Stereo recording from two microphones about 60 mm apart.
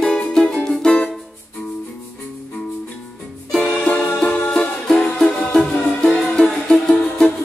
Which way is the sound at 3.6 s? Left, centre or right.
Centre.